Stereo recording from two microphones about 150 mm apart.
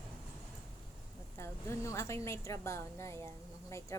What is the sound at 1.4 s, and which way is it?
A woman's voice, 20° left (ahead or behind).